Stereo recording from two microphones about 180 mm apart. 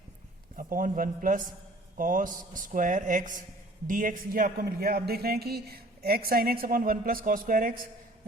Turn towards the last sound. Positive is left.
turn(degrees=-50)  # may be behind; listen again after turning